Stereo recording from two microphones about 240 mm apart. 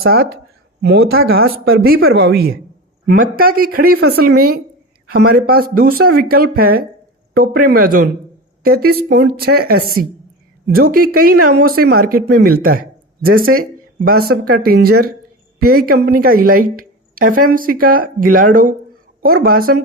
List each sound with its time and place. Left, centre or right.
0.1 s a woman's voice: right
13.2 s a woman's voice: right